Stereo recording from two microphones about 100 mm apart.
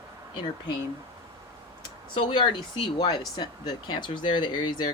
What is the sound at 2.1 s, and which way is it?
Speech, 55° left (ahead or behind).